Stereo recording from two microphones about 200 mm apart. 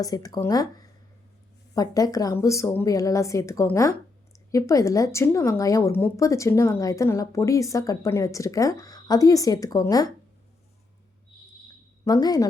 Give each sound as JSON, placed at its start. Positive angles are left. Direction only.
{"t": 0.0, "sound": "speech", "side_deg": 20}
{"t": 12.0, "sound": "a woman's voice", "side_deg": 20}